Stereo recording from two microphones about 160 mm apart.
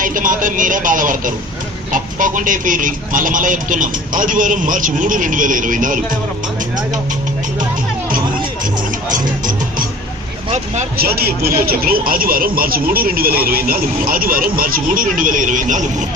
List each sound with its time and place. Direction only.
0.0 s a man's voice: 55° right (ahead or behind)
9.0 s music: 55° right (ahead or behind)
10.9 s a man's voice: 75° right (ahead or behind); by 16.0 s 50° right (ahead or behind)